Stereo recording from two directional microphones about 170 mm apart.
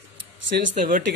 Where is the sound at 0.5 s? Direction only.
70° right (ahead or behind).